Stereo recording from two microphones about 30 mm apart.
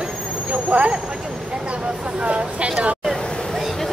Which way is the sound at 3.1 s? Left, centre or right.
Left.